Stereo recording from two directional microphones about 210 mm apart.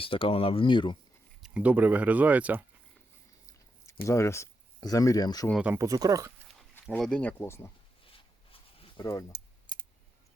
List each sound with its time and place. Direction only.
0.0 s speech: 25° left (ahead or behind)
1.4 s speech: 5° right (ahead or behind)
4.0 s speech: 15° left (ahead or behind)
5.5 s speech: 5° right (ahead or behind)
6.8 s speech: 5° left (ahead or behind)
8.0 s a sound: 25° left (ahead or behind)
9.7 s computer keyboard: 20° left (ahead or behind)